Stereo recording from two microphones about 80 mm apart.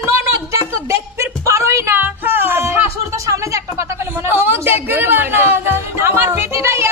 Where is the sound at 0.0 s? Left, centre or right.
Right.